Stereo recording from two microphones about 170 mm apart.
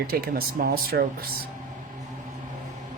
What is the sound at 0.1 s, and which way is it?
Speech, 60° right (ahead or behind).